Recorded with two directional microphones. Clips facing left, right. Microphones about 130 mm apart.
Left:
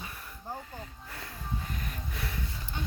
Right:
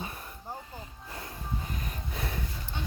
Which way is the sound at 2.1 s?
30° right (ahead or behind).